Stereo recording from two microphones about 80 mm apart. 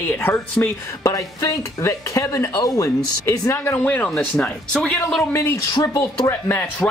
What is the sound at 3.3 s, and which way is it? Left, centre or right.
Speech, left.